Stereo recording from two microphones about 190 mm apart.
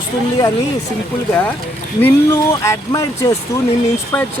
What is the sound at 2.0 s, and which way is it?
Speech, 10° left (ahead or behind).